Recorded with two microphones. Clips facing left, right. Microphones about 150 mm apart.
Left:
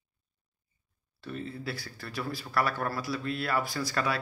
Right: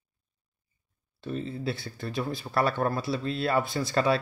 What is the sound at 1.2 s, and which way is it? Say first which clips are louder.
Speech: right 5 dB; 20° right (ahead or behind).